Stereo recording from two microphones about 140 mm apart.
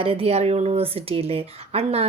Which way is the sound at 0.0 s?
40° right (ahead or behind).